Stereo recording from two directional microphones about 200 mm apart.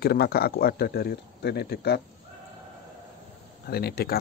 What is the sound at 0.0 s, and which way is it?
Speech, 50° left (ahead or behind).